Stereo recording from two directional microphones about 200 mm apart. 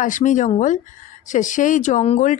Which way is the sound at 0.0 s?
40° left (ahead or behind).